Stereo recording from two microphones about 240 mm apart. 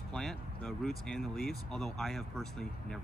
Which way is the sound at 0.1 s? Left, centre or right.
Centre.